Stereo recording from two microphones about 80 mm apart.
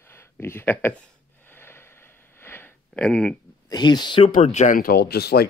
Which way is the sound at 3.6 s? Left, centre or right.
Left.